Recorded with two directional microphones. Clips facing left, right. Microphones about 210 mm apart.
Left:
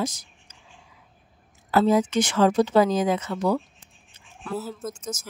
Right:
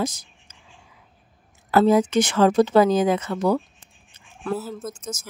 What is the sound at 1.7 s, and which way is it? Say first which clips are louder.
Speech: right 3 dB; 60° right (ahead or behind).